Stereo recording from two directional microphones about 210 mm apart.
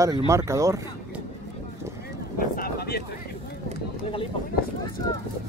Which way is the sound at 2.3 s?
45° left (ahead or behind).